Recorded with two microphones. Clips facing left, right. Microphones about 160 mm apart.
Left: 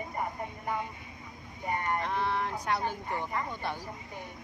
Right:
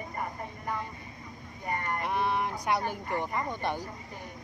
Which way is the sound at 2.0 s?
15° right (ahead or behind).